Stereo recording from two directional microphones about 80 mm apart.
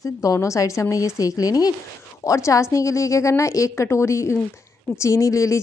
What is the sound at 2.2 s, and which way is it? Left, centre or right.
Speech, left.